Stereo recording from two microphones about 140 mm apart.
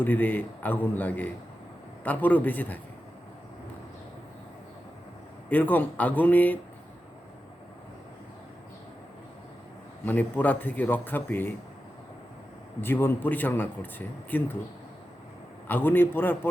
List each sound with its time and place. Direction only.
0.0 s speech: 15° left (ahead or behind)
5.5 s speech: 15° left (ahead or behind)
10.1 s speech: 10° left (ahead or behind)
12.8 s speech: 15° left (ahead or behind)
15.6 s speech: 15° left (ahead or behind)